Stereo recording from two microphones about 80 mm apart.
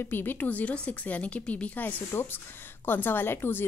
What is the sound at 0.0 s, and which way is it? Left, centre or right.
Speech, left.